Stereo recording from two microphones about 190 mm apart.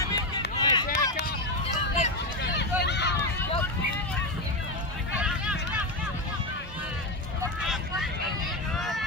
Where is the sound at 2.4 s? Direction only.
60° left (ahead or behind).